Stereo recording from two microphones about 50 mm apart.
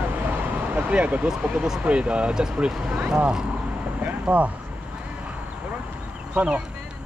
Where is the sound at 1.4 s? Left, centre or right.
Right.